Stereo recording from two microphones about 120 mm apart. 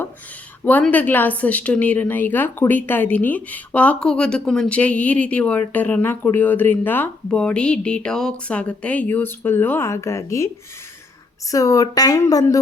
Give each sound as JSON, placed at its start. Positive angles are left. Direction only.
{"t": 0.6, "sound": "a woman's voice", "side_deg": 15}
{"t": 11.5, "sound": "speech", "side_deg": 30}